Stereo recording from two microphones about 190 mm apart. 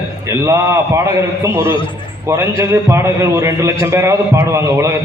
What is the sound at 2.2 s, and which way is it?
A man's voice, 15° right (ahead or behind).